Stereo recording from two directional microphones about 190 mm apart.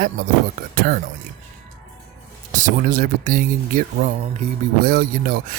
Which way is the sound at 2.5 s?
45° right (ahead or behind).